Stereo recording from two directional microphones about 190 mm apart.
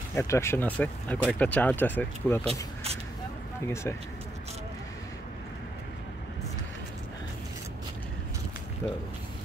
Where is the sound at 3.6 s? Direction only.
15° left (ahead or behind).